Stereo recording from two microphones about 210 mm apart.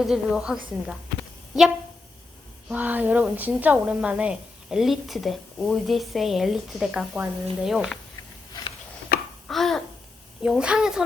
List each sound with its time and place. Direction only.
0.0 s a woman's voice: centre (ahead or behind)
2.6 s a woman's voice: 10° right (ahead or behind)
9.1 s babbling: 45° left (ahead or behind)
9.5 s babbling: centre (ahead or behind)
10.4 s a woman's voice: 5° right (ahead or behind)